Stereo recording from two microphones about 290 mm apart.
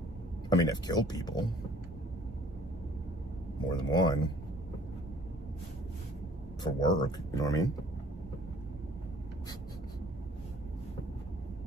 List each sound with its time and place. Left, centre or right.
0.5 s speech: centre
3.7 s speech: centre
6.6 s speech: centre